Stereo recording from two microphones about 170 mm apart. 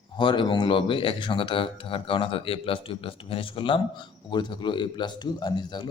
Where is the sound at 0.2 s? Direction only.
30° left (ahead or behind).